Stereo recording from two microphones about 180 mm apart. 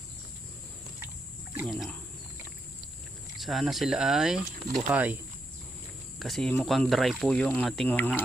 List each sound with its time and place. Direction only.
1.6 s speech: centre (ahead or behind)
3.4 s speech: centre (ahead or behind)
6.1 s speech: centre (ahead or behind)